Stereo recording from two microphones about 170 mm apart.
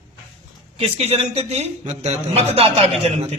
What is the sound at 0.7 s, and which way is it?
A man's voice, 35° right (ahead or behind).